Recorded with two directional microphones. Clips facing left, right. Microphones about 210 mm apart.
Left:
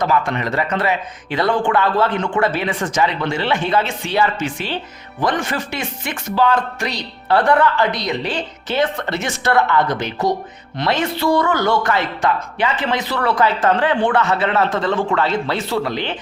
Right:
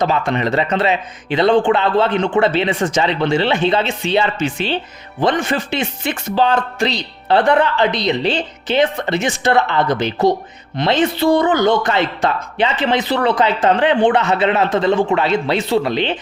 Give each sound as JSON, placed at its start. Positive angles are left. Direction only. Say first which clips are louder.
{"t": 0.0, "sound": "speech", "louder": "right 2 dB", "side_deg": -25}